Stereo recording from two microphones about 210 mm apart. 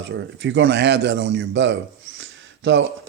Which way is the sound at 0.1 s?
60° right (ahead or behind).